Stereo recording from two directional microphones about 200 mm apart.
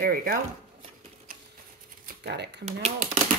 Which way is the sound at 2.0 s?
55° right (ahead or behind).